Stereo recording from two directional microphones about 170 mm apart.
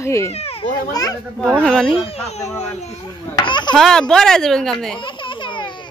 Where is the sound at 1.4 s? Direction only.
Centre (ahead or behind).